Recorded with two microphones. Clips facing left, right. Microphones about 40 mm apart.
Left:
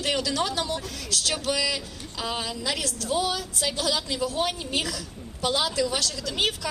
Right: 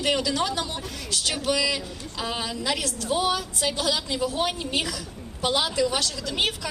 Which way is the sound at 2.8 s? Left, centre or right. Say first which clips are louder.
Right 1 dB; right.